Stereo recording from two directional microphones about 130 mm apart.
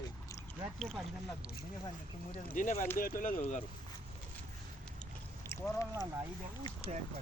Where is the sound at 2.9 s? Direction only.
90° left; by 3.6 s 70° left (ahead or behind).